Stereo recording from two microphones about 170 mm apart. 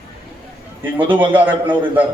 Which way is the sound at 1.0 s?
10° right (ahead or behind).